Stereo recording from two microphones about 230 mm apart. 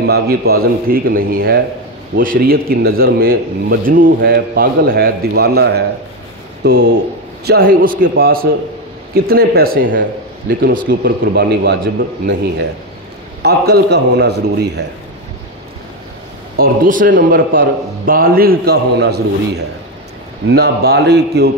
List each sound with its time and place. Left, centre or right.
0.0 s a man's voice: right
16.5 s a man's voice: right